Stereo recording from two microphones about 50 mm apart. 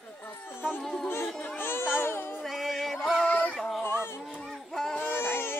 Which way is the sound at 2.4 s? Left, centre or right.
Centre.